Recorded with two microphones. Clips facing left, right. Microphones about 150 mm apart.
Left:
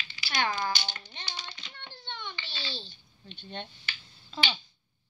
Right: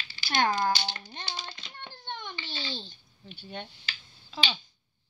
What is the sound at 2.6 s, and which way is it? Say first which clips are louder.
Speech: even; 50° right (ahead or behind).